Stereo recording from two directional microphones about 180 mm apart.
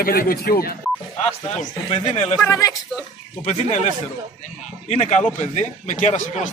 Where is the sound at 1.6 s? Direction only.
40° left (ahead or behind).